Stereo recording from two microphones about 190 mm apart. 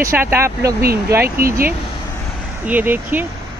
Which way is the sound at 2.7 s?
10° right (ahead or behind).